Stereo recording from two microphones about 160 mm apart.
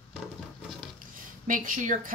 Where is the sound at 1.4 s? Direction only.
55° right (ahead or behind).